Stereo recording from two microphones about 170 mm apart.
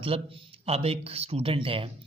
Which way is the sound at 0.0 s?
35° right (ahead or behind).